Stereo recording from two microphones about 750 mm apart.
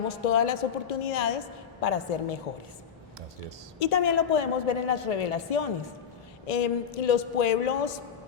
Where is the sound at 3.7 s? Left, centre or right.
Left.